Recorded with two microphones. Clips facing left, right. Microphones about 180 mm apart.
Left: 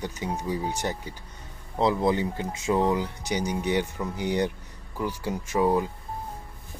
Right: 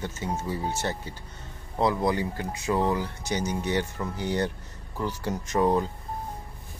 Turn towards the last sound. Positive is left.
turn(degrees=10)  # may be behind; listen again after turning